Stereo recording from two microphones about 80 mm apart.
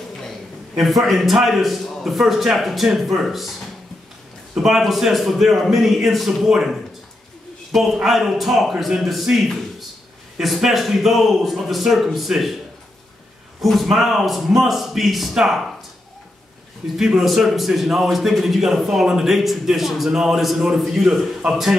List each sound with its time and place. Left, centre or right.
0.7 s a man's voice: centre
4.6 s a man's voice: centre
13.6 s a man's voice: centre
16.9 s a man's voice: centre